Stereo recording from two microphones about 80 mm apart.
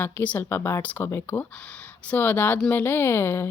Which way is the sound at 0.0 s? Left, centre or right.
Left.